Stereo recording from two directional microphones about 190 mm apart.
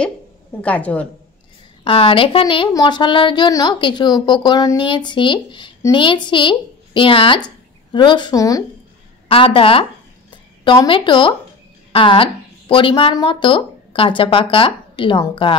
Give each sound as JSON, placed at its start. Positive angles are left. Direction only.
{"t": 0.0, "sound": "a woman's voice", "side_deg": 5}
{"t": 1.9, "sound": "a woman's voice", "side_deg": 30}
{"t": 9.3, "sound": "a woman's voice", "side_deg": 30}